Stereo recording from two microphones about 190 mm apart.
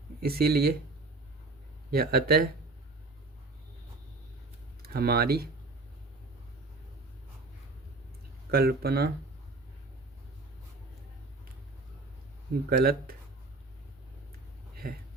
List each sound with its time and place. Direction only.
0.2 s speech: 55° right (ahead or behind)
1.9 s speech: 55° right (ahead or behind)
4.9 s speech: 55° right (ahead or behind)
8.4 s speech: 55° right (ahead or behind)
12.7 s speech: 50° right (ahead or behind)
14.8 s speech: 50° right (ahead or behind)